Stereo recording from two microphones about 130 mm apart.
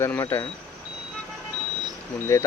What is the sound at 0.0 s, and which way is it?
Speech, 20° left (ahead or behind).